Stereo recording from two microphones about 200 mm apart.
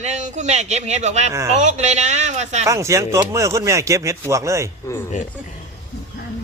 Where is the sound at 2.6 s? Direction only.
15° right (ahead or behind).